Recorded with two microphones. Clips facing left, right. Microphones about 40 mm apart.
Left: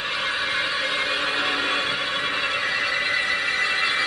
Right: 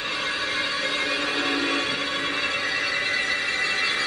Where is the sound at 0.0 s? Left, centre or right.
Centre.